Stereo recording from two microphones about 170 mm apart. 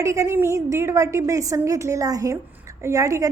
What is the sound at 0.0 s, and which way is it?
A woman's voice, 20° right (ahead or behind).